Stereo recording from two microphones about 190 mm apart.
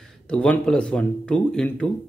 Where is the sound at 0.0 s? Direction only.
5° left (ahead or behind).